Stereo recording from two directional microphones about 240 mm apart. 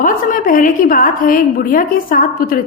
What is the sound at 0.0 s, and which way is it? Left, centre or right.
A woman's voice, left.